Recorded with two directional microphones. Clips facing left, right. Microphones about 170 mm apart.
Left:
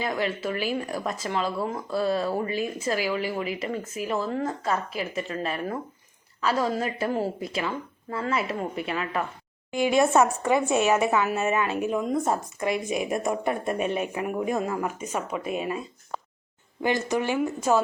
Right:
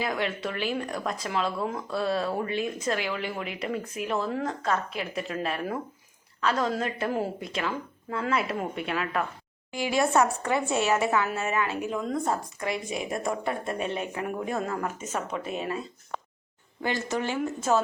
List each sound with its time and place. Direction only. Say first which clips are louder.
0.0 s a woman's voice: left 2 dB; centre (ahead or behind)
9.7 s speech: left 4 dB; 20° left (ahead or behind)
16.8 s speech: left 4 dB; 15° left (ahead or behind)